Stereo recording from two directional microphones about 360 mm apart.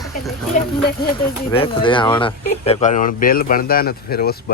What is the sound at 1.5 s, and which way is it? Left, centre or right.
Speech, centre.